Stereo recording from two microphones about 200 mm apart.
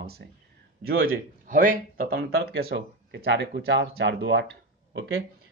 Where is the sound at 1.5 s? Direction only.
45° right (ahead or behind); by 4.5 s 60° right (ahead or behind).